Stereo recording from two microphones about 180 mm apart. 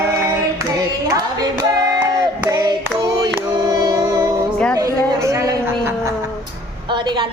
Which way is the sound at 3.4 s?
15° right (ahead or behind).